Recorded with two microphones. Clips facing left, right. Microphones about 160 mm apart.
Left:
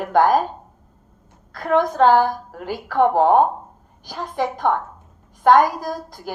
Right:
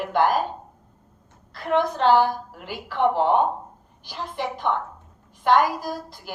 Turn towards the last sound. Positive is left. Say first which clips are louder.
# left 2 dB
turn(degrees=45)  # may be behind; listen again after turning